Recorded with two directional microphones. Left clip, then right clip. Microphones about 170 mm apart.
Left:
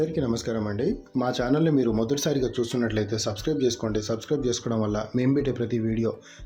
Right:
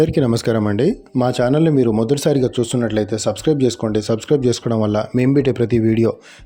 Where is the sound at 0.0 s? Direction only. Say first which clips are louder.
Right 10 dB; 55° right (ahead or behind).